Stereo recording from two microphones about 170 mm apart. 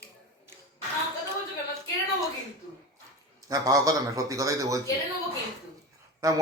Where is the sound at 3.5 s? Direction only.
20° right (ahead or behind).